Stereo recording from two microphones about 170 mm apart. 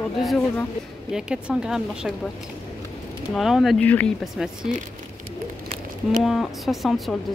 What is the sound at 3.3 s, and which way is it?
Speech, centre (ahead or behind).